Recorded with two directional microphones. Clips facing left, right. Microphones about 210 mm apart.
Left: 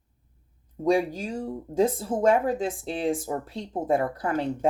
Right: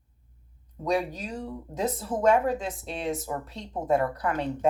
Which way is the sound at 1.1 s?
30° left (ahead or behind).